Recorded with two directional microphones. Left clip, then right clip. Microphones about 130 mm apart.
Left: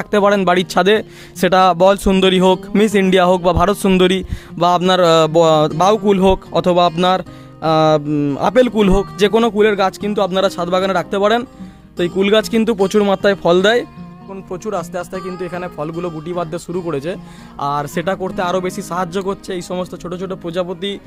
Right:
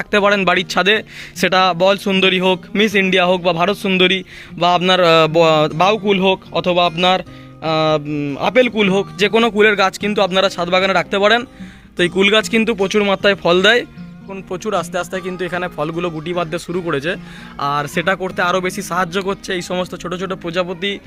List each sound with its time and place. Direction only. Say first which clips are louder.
0.0 s a man's voice: even; 30° left (ahead or behind)
6.1 s speech: left 2 dB; 70° left (ahead or behind); by 9.2 s 50° left (ahead or behind)
9.2 s speech: even; 25° left (ahead or behind)
11.9 s a man's voice: right 1 dB; 10° left (ahead or behind)
12.8 s speech: left 2 dB; 45° left (ahead or behind); by 13.8 s 25° left (ahead or behind)
14.3 s speech: right 2 dB; centre (ahead or behind)
17.6 s speech: right 1 dB; 20° left (ahead or behind)
20.5 s speech: right 1 dB; 25° left (ahead or behind)